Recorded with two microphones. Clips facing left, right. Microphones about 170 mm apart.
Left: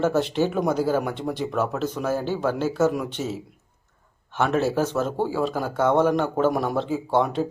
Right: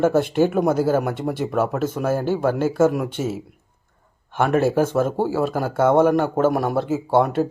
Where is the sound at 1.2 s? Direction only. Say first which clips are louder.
Right 3 dB; 5° right (ahead or behind).